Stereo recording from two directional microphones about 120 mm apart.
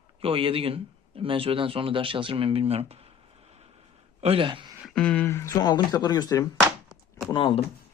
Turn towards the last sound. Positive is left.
turn(degrees=45)  # may be behind; listen again after turning